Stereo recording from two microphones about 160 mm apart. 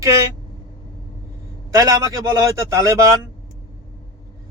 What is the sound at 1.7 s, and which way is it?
Speech, 20° right (ahead or behind).